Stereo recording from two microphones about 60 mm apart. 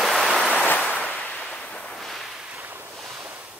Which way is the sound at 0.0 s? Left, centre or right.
Centre.